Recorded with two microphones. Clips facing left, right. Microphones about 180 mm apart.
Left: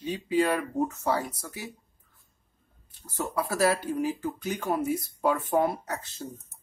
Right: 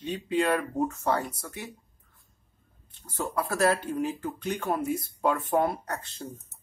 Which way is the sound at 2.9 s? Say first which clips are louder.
Even; 5° left (ahead or behind).